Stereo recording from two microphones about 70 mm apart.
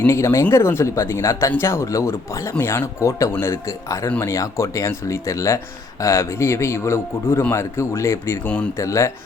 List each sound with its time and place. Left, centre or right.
0.1 s speech: left